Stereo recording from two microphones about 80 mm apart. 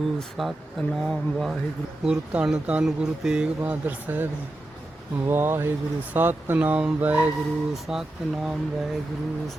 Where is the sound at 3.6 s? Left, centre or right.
Right.